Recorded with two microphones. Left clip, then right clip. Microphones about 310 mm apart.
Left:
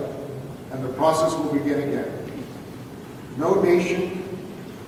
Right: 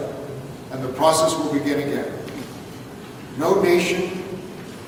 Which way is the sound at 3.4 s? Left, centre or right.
Centre.